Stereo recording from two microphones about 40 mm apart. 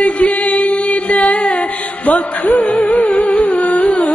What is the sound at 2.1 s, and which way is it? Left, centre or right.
Music, left.